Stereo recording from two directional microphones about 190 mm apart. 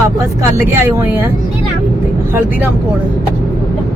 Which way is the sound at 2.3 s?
10° right (ahead or behind).